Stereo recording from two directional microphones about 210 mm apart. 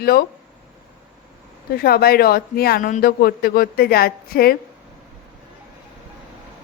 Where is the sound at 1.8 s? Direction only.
45° left (ahead or behind).